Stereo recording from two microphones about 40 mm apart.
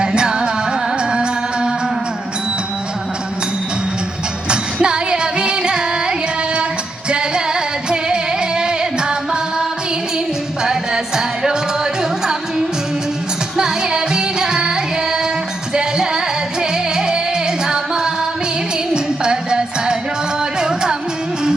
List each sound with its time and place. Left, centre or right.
0.0 s music: right
4.4 s music: right
15.7 s music: centre